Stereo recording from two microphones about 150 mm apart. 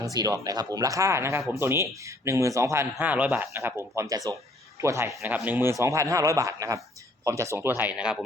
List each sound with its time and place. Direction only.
0.0 s speech: 25° right (ahead or behind); by 8.2 s 5° right (ahead or behind)